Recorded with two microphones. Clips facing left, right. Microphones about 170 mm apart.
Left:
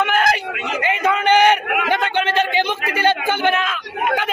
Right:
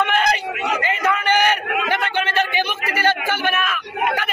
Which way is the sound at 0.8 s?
20° left (ahead or behind).